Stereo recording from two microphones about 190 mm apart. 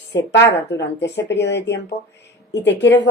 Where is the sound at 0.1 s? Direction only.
65° left (ahead or behind).